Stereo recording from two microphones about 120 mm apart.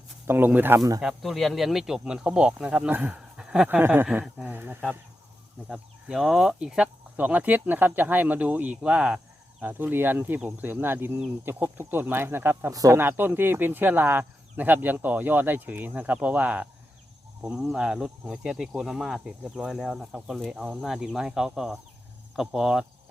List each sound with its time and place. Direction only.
0.3 s speech: 15° right (ahead or behind)
0.8 s speech: 30° right (ahead or behind)
1.0 s speech: centre (ahead or behind); by 12.7 s 20° right (ahead or behind)
12.7 s speech: 30° right (ahead or behind)
13.0 s speech: 15° right (ahead or behind)